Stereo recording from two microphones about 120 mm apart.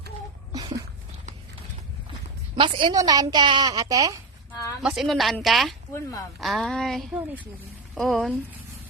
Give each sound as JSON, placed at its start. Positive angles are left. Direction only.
{"t": 2.6, "sound": "a woman's voice", "side_deg": -45}
{"t": 2.9, "sound": "a woman's voice", "side_deg": -30}
{"t": 4.8, "sound": "a woman's voice", "side_deg": -5}
{"t": 5.9, "sound": "speech", "side_deg": 30}
{"t": 6.4, "sound": "a woman's voice", "side_deg": 0}